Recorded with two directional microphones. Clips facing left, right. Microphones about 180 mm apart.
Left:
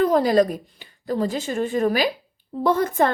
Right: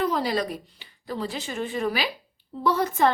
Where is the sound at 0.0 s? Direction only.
50° left (ahead or behind).